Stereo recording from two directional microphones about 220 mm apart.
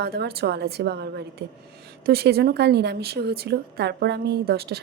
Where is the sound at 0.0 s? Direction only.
45° right (ahead or behind).